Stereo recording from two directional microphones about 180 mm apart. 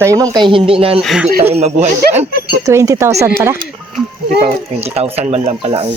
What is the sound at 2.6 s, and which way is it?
Speech, 20° right (ahead or behind).